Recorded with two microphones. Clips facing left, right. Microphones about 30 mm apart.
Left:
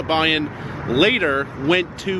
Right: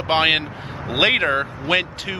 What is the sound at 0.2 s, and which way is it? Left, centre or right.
Speech, centre.